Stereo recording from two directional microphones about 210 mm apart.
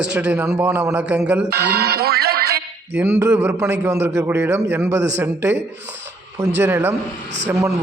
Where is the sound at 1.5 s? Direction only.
50° right (ahead or behind).